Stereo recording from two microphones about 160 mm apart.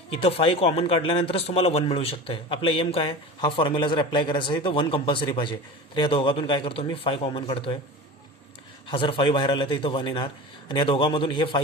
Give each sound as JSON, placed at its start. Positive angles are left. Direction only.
{"t": 0.2, "sound": "speech", "side_deg": 35}
{"t": 8.9, "sound": "speech", "side_deg": 30}